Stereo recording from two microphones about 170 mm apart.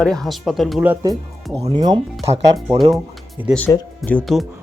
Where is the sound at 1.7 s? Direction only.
25° right (ahead or behind).